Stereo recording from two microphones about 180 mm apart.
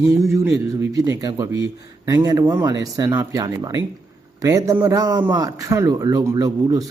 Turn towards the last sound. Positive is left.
turn(degrees=-20)  # may be behind; listen again after turning